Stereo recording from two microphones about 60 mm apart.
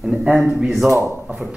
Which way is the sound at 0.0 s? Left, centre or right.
Centre.